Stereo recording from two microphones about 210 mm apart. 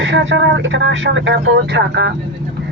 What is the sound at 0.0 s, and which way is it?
Speech, 60° right (ahead or behind).